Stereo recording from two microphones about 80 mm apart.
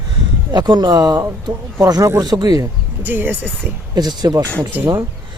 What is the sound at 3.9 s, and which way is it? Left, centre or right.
Speech, right.